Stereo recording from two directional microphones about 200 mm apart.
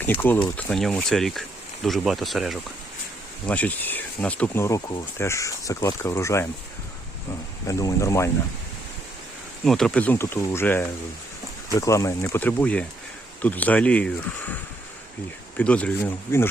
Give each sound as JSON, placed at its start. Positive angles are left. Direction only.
{"t": 0.0, "sound": "speech", "side_deg": 10}
{"t": 7.7, "sound": "speech", "side_deg": 15}
{"t": 9.6, "sound": "speech", "side_deg": 5}
{"t": 15.5, "sound": "speech", "side_deg": 5}